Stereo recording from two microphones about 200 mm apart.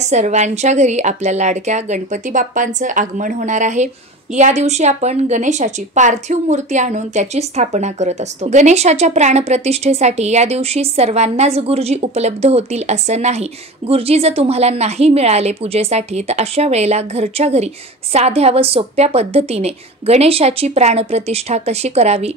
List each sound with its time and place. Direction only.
0.1 s a woman's voice: 35° right (ahead or behind)